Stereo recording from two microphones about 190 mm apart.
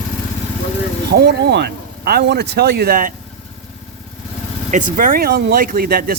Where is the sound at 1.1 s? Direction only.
60° right (ahead or behind).